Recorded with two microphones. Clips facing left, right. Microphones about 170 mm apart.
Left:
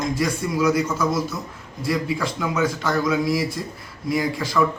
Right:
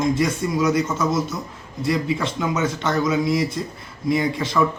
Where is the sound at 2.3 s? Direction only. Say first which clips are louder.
Even; 20° right (ahead or behind).